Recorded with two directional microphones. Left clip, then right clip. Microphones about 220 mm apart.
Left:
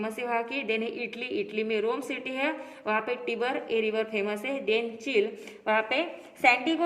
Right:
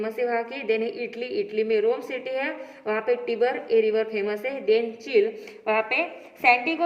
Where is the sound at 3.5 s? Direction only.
40° left (ahead or behind).